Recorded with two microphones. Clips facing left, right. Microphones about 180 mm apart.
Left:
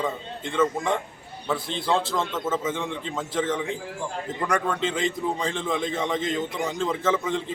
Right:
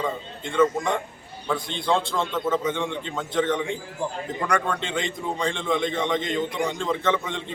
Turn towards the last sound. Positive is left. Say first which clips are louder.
# left 1 dB
turn(degrees=5)  # may be behind; listen again after turning